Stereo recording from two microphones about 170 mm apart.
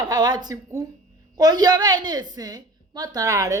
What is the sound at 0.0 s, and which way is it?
A woman's voice, 25° right (ahead or behind).